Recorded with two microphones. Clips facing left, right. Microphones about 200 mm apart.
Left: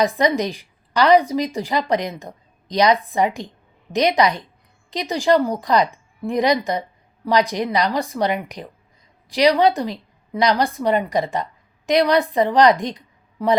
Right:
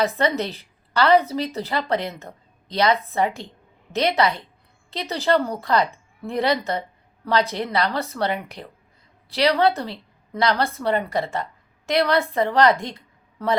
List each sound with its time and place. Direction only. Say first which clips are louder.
0.0 s a woman's voice: left 3 dB; 15° left (ahead or behind)